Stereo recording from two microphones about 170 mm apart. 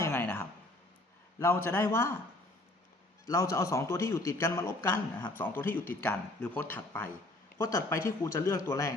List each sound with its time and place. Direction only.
0.0 s a sound: 10° left (ahead or behind)
1.4 s a man's voice: 15° left (ahead or behind)
3.2 s a man's voice: 20° left (ahead or behind)